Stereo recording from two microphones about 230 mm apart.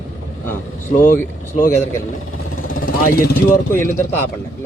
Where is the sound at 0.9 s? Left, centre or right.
Left.